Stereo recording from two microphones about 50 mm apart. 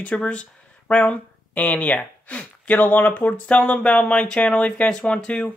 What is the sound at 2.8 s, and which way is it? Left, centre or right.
Speech, left.